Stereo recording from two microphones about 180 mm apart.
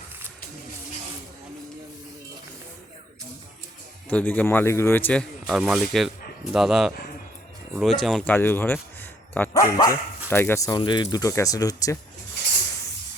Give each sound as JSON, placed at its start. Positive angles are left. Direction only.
{"t": 4.1, "sound": "speech", "side_deg": 10}
{"t": 5.5, "sound": "speech", "side_deg": -5}
{"t": 10.8, "sound": "speech", "side_deg": 25}